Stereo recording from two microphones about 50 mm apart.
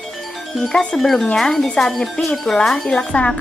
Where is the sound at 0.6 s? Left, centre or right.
Centre.